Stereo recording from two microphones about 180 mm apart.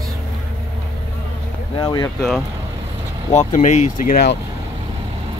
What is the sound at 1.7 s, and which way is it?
Speech, 20° left (ahead or behind).